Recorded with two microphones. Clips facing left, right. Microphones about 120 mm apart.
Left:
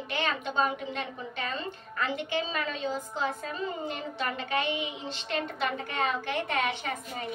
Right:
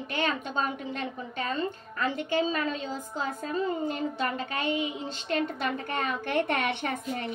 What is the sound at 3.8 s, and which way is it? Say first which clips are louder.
A woman's voice: right 4 dB; 40° right (ahead or behind).